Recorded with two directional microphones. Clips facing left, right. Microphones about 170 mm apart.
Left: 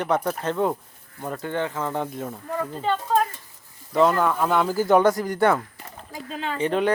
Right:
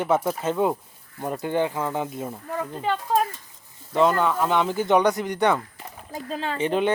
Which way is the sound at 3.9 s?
Centre (ahead or behind).